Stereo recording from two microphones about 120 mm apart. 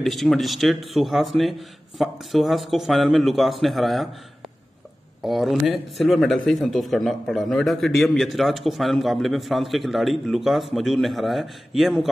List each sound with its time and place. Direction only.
0.0 s speech: centre (ahead or behind)
5.2 s speech: centre (ahead or behind)